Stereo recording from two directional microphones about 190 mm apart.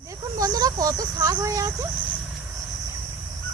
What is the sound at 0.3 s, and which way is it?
Snake, 20° right (ahead or behind).